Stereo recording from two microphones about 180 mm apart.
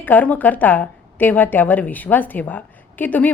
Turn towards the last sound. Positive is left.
turn(degrees=10)  # may be behind; listen again after turning